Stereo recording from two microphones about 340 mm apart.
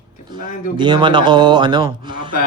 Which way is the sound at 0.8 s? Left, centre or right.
Centre.